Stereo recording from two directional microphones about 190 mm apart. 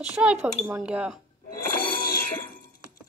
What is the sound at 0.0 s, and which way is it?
Speech, 5° right (ahead or behind).